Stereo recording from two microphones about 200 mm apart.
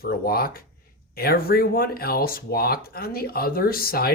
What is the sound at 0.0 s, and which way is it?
Speech, 50° left (ahead or behind).